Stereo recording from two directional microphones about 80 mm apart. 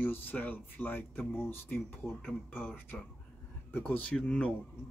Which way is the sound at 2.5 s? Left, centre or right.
Left.